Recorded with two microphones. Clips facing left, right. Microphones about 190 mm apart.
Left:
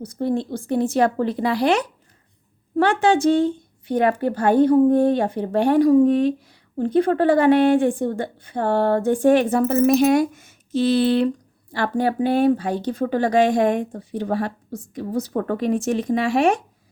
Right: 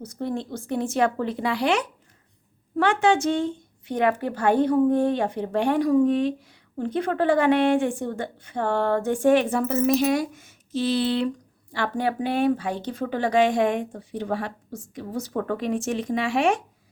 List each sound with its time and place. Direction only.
0.0 s a woman's voice: 30° left (ahead or behind)
9.7 s speech: 55° left (ahead or behind)
11.7 s a woman's voice: 40° left (ahead or behind)